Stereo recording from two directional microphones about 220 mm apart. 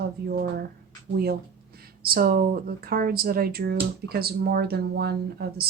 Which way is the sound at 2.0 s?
40° right (ahead or behind).